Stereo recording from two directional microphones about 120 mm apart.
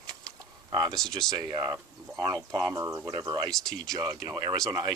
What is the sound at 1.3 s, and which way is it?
Speech, 30° right (ahead or behind).